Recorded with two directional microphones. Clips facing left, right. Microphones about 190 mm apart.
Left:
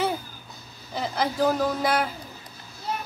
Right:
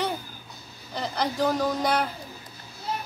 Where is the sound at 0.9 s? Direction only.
5° left (ahead or behind).